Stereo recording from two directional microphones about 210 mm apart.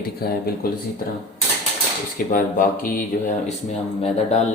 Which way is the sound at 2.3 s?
40° left (ahead or behind).